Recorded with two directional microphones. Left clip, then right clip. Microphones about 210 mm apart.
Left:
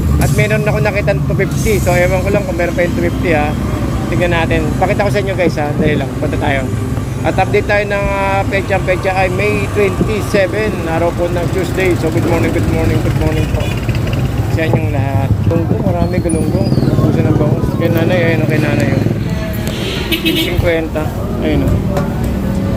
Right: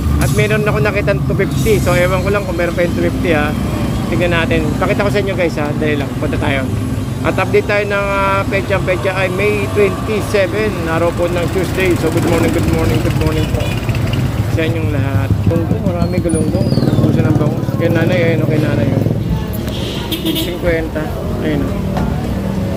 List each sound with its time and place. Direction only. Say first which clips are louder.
0.2 s speech: even; 15° right (ahead or behind)
7.3 s speech: left 1 dB; 10° right (ahead or behind)
17.8 s speech: even; 5° right (ahead or behind)